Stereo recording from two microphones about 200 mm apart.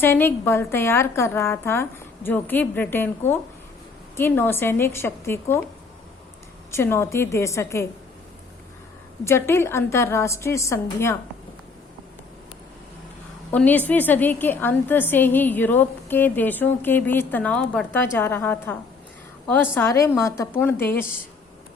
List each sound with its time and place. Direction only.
0.0 s a woman's voice: 10° left (ahead or behind)
6.7 s a woman's voice: 15° left (ahead or behind)
9.2 s a woman's voice: 10° left (ahead or behind)
13.5 s a woman's voice: 5° left (ahead or behind)